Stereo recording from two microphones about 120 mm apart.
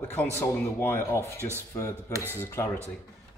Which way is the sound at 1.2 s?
20° right (ahead or behind).